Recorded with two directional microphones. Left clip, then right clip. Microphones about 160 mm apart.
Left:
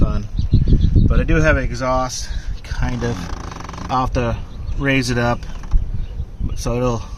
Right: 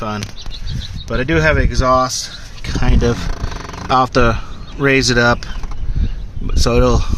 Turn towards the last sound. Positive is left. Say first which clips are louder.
# right 7 dB
turn(degrees=-45)  # may be behind; listen again after turning